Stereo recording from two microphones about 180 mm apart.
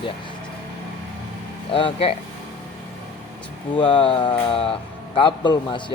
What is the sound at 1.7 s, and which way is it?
Speech, 30° left (ahead or behind).